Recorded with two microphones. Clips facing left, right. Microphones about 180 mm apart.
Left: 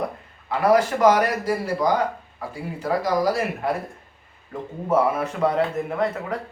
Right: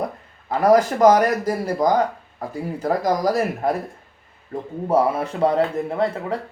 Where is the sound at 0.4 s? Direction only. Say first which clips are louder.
Right 3 dB; 40° right (ahead or behind).